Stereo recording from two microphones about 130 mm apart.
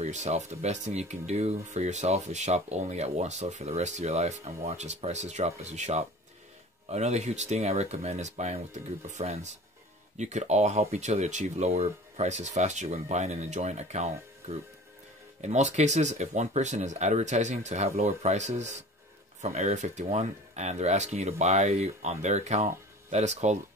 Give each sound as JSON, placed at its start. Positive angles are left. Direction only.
{"t": 0.0, "sound": "speech", "side_deg": -60}
{"t": 15.4, "sound": "speech", "side_deg": -60}